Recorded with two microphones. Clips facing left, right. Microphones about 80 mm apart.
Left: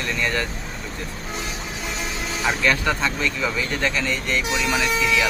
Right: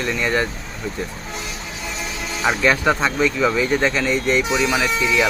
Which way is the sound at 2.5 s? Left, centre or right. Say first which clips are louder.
Right 4 dB; centre.